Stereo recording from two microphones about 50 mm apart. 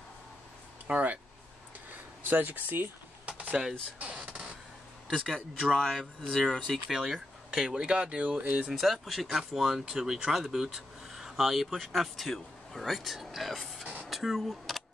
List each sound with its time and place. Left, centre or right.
0.8 s speech: right
2.2 s speech: right
3.3 s a sound: right
5.1 s speech: centre
6.9 s speech: centre
7.7 s speech: centre; by 8.6 s right
8.7 s speech: centre
14.0 s a sound: centre